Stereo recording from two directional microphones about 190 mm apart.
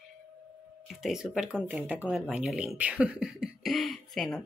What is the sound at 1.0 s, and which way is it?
Speech, 5° right (ahead or behind).